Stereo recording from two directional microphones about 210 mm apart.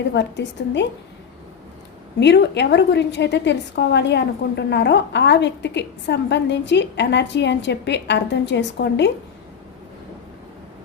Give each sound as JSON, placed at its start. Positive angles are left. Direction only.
{"t": 0.1, "sound": "a woman's voice", "side_deg": 55}
{"t": 2.1, "sound": "a woman's voice", "side_deg": 55}